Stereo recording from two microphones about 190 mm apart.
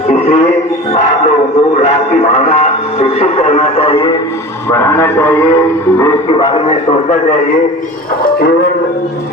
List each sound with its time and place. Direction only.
0.1 s music: 35° left (ahead or behind)
0.9 s speech: 35° left (ahead or behind)
4.7 s a man's voice: 15° left (ahead or behind)
6.2 s a man's voice: 30° left (ahead or behind)
8.2 s speech: 55° left (ahead or behind)